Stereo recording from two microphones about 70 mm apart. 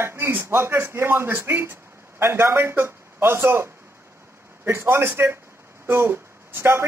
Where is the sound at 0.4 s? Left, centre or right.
Right.